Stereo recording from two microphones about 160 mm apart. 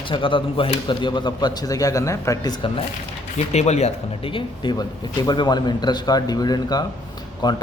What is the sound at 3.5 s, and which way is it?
Speech, 45° left (ahead or behind).